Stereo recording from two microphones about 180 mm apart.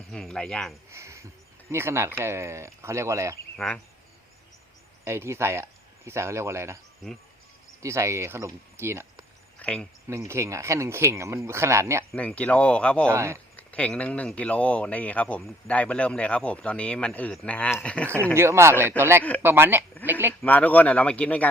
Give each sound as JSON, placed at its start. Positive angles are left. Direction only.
{"t": 0.1, "sound": "speech", "side_deg": 5}
{"t": 0.9, "sound": "a sound", "side_deg": -15}
{"t": 1.7, "sound": "speech", "side_deg": -15}
{"t": 3.6, "sound": "speech", "side_deg": 5}
{"t": 5.0, "sound": "speech", "side_deg": -15}
{"t": 7.8, "sound": "speech", "side_deg": -15}
{"t": 9.6, "sound": "a sound", "side_deg": 5}
{"t": 10.1, "sound": "speech", "side_deg": -15}
{"t": 12.1, "sound": "speech", "side_deg": 5}
{"t": 13.1, "sound": "speech", "side_deg": -15}
{"t": 13.6, "sound": "speech", "side_deg": 5}
{"t": 18.3, "sound": "speech", "side_deg": -15}
{"t": 20.4, "sound": "speech", "side_deg": 10}